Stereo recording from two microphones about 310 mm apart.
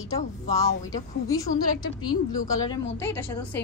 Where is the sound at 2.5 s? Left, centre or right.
Centre.